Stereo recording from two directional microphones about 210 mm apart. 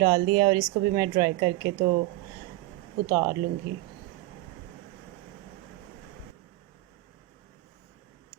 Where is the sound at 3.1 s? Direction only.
15° right (ahead or behind).